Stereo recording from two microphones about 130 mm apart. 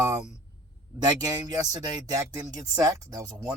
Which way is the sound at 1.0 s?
30° right (ahead or behind).